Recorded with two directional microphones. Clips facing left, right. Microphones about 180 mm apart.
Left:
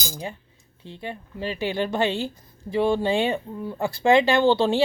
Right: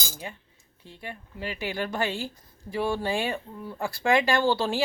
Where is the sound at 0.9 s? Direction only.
25° left (ahead or behind).